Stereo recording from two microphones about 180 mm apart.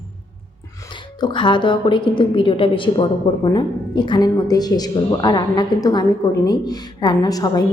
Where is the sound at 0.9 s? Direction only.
25° left (ahead or behind).